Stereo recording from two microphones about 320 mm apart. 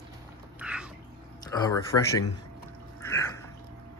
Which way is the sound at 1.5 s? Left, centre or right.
Centre.